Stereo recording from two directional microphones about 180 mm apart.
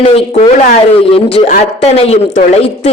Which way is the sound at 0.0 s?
35° left (ahead or behind).